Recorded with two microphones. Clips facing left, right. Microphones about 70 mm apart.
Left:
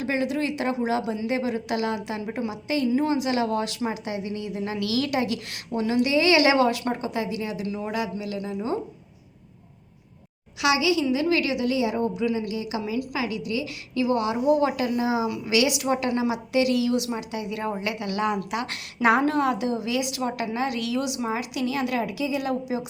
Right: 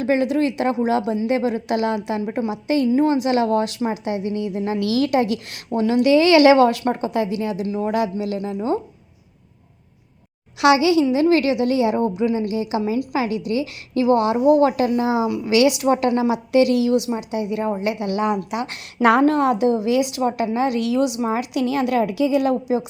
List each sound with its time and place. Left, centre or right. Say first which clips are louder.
0.0 s a woman's voice: right 7 dB; right
10.6 s a woman's voice: right 7 dB; right
16.9 s a woman's voice: right 6 dB; right
18.9 s a woman's voice: right 5 dB; right